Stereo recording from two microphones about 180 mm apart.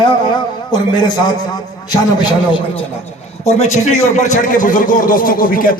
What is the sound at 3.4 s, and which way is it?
Speech, 35° left (ahead or behind).